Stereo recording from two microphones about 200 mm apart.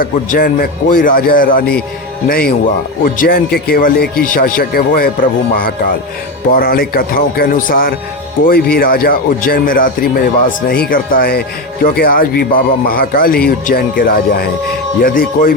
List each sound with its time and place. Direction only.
0.0 s a man's voice: 45° left (ahead or behind)